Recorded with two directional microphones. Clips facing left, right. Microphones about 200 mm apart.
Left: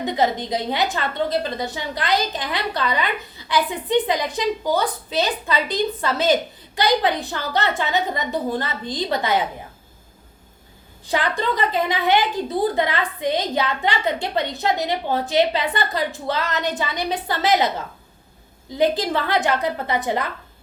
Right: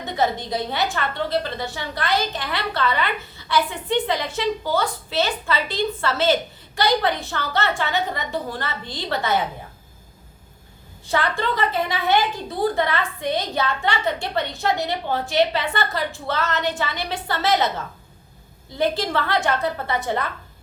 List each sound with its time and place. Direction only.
0.0 s a woman's voice: 20° left (ahead or behind)
11.1 s a woman's voice: 15° left (ahead or behind)
18.8 s a woman's voice: 20° left (ahead or behind)